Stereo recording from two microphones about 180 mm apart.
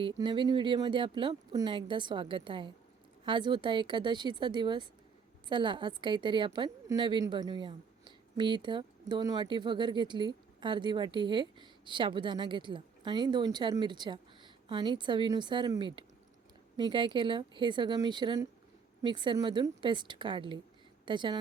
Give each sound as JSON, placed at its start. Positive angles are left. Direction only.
{"t": 0.0, "sound": "a woman's voice", "side_deg": -25}